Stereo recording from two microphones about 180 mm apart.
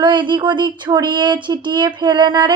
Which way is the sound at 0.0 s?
25° right (ahead or behind).